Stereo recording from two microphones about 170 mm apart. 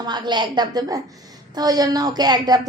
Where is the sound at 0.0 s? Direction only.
25° right (ahead or behind).